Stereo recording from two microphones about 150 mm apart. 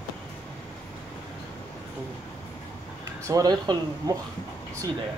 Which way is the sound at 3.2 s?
25° right (ahead or behind).